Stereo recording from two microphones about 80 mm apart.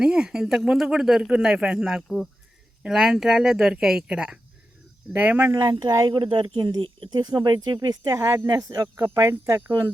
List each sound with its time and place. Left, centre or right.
0.0 s speech: centre
5.5 s speech: right
6.1 s speech: right
9.3 s speech: right